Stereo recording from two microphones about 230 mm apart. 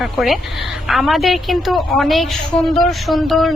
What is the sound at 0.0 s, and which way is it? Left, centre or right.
Speech, centre.